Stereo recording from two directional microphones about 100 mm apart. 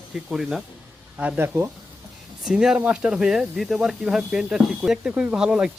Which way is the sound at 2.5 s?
5° right (ahead or behind).